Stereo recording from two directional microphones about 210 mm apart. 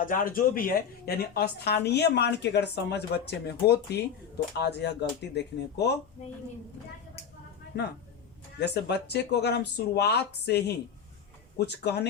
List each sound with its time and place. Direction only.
0.0 s a woman's voice: 40° left (ahead or behind)
7.7 s a woman's voice: 50° left (ahead or behind)